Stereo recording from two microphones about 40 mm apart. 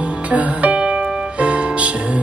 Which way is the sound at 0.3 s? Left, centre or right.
Right.